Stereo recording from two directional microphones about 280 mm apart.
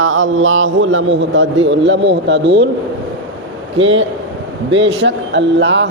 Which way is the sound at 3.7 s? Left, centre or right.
Right.